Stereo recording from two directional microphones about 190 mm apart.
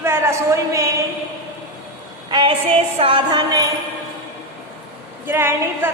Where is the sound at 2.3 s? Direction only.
25° right (ahead or behind).